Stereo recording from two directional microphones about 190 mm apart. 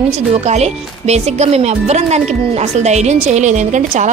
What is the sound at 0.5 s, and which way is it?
Speech, 35° right (ahead or behind).